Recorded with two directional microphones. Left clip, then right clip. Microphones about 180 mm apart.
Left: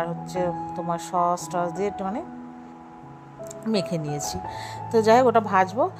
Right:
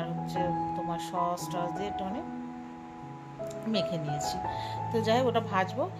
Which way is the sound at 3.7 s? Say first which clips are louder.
Left 5 dB; 40° left (ahead or behind).